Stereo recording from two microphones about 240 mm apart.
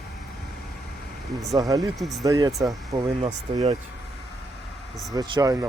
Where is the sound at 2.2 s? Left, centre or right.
Centre.